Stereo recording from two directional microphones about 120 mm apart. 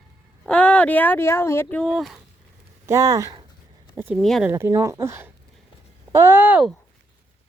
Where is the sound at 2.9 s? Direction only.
30° right (ahead or behind).